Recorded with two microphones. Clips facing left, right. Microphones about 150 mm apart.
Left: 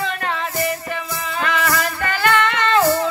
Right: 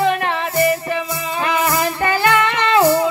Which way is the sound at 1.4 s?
20° right (ahead or behind).